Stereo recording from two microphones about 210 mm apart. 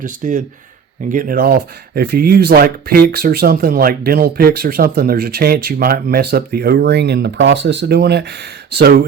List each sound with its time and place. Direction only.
0.0 s speech: 35° right (ahead or behind)